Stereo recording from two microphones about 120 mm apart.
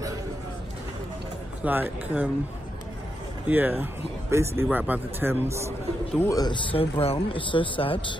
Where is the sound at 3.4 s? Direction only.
15° right (ahead or behind).